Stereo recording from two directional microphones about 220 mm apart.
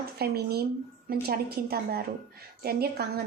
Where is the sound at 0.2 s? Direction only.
45° right (ahead or behind).